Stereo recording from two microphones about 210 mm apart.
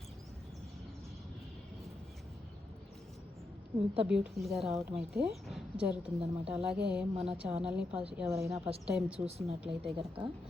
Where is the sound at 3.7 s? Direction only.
10° right (ahead or behind).